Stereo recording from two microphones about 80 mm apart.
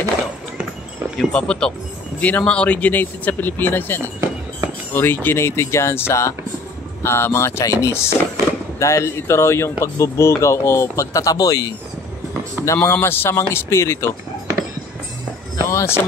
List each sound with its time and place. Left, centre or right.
1.2 s a man's voice: centre; by 11.7 s left
12.7 s speech: left
15.6 s speech: left